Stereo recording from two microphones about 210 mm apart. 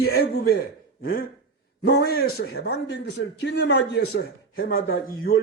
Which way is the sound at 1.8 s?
50° left (ahead or behind).